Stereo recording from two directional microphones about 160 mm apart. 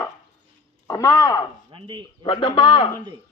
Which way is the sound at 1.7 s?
30° right (ahead or behind).